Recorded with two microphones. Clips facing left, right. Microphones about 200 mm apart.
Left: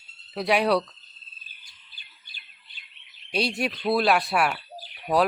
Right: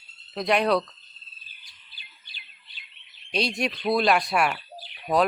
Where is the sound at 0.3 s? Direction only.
5° left (ahead or behind).